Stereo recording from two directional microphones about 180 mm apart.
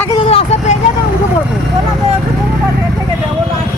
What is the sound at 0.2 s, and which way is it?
Vehicle, 35° left (ahead or behind).